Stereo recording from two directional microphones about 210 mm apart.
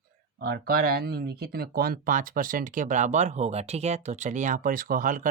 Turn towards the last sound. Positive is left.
turn(degrees=-40)  # may be behind; listen again after turning